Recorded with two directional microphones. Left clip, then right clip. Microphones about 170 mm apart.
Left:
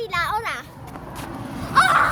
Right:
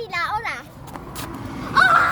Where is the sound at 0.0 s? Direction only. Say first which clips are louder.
Left 1 dB; 25° left (ahead or behind).